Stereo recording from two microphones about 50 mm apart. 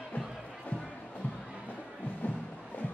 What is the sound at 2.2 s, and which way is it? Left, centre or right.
Music, left.